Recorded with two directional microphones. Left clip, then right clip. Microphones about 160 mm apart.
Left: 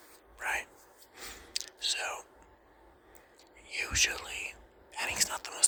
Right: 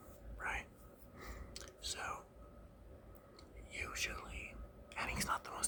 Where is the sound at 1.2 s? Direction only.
25° left (ahead or behind).